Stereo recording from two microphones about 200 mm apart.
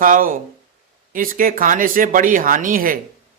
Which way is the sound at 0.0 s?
45° right (ahead or behind).